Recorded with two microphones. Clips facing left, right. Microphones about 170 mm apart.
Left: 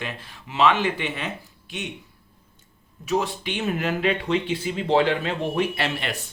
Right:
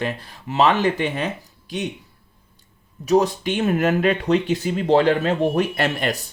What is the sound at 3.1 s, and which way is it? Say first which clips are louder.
Speech: right 7 dB; 40° right (ahead or behind).